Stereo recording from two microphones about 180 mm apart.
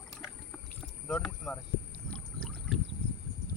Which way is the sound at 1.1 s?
Centre (ahead or behind).